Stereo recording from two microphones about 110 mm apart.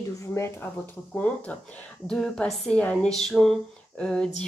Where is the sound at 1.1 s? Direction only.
15° left (ahead or behind).